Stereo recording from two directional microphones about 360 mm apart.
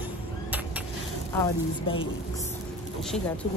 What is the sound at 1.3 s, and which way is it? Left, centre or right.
Speech, centre.